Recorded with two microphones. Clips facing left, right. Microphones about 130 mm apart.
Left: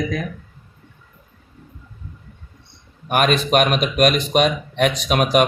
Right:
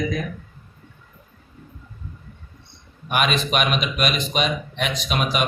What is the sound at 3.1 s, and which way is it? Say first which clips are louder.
Speech: left 5 dB; 45° left (ahead or behind).